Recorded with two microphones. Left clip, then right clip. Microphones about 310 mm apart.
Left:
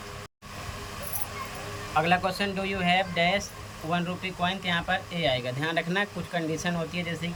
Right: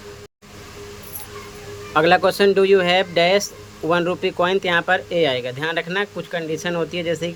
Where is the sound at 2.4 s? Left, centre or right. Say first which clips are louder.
Right 14 dB; centre.